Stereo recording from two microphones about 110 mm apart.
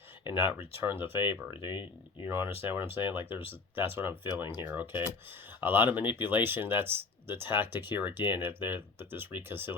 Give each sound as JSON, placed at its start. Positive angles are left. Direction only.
{"t": 0.3, "sound": "speech", "side_deg": 50}
{"t": 0.9, "sound": "speech", "side_deg": -20}
{"t": 1.6, "sound": "speech", "side_deg": 45}
{"t": 2.2, "sound": "speech", "side_deg": -20}